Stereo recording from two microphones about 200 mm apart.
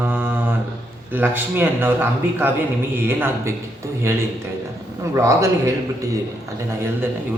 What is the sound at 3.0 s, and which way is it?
A man's voice, 10° right (ahead or behind).